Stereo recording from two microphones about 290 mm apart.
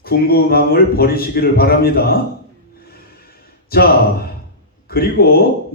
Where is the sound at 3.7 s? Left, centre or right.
Left.